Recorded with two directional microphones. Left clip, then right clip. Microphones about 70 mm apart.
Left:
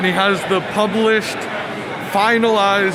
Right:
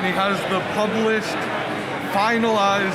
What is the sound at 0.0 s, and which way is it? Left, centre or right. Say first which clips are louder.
Speech: left 5 dB; left.